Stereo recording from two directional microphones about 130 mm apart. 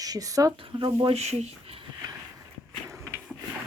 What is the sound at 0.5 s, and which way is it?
Speech, 40° right (ahead or behind).